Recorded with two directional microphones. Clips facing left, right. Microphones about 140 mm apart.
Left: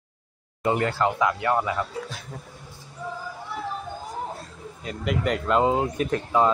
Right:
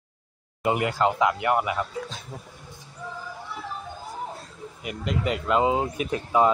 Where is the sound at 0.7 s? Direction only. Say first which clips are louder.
Even; 15° right (ahead or behind).